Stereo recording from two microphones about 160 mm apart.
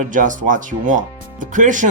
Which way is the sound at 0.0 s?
55° right (ahead or behind).